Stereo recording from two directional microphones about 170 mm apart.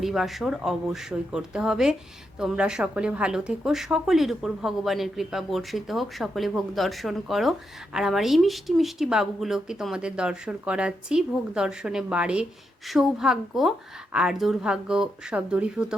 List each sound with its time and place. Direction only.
0.0 s speech: centre (ahead or behind)